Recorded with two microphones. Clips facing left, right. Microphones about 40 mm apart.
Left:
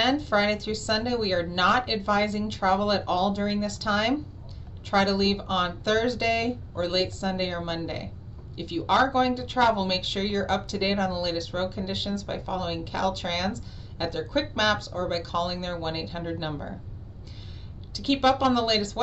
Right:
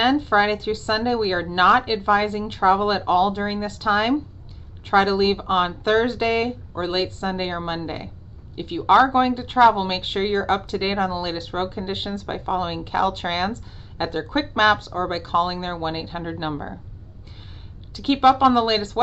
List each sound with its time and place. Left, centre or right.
0.0 s a woman's voice: right
17.9 s a woman's voice: right